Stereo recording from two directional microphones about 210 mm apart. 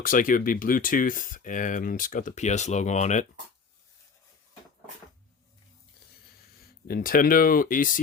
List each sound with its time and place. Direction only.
0.0 s speech: 40° left (ahead or behind)
6.8 s speech: 45° left (ahead or behind)